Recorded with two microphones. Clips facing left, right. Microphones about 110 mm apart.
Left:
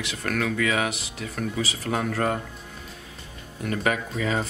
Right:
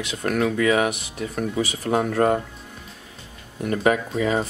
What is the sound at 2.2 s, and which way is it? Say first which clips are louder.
Speech: right 7 dB; 25° right (ahead or behind).